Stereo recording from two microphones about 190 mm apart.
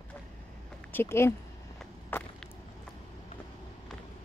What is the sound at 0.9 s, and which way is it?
Speech, 15° left (ahead or behind).